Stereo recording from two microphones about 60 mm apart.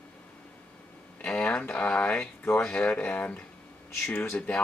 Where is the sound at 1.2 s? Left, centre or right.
Centre.